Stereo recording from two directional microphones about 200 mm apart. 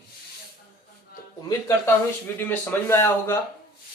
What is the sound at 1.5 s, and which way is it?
Speech, 15° left (ahead or behind).